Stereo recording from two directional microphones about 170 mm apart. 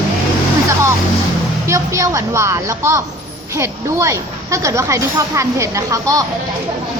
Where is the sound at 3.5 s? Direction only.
15° right (ahead or behind).